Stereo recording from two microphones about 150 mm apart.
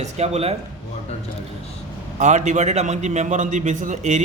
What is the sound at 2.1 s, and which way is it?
A man's voice, 50° right (ahead or behind).